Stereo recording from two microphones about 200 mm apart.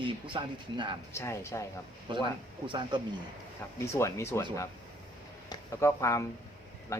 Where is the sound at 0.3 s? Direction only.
25° right (ahead or behind).